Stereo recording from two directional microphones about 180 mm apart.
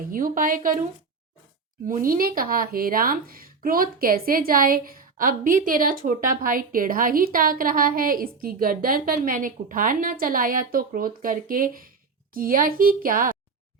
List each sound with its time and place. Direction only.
0.0 s speech: 50° right (ahead or behind)
1.9 s speech: 50° right (ahead or behind)